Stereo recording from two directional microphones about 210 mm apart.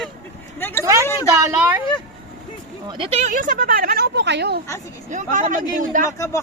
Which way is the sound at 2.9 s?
25° right (ahead or behind).